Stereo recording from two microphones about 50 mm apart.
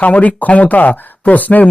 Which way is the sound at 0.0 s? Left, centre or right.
Left.